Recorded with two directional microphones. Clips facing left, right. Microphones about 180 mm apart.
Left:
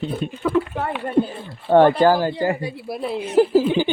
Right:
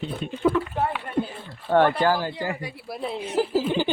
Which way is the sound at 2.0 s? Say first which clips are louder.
Left 6 dB; 40° left (ahead or behind).